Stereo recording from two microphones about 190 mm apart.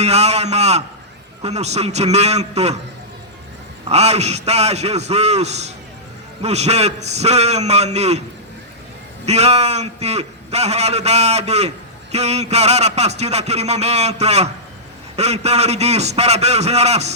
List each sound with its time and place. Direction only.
0.0 s a man's voice: 35° right (ahead or behind)
3.8 s a man's voice: 35° right (ahead or behind)
9.2 s a man's voice: 35° right (ahead or behind)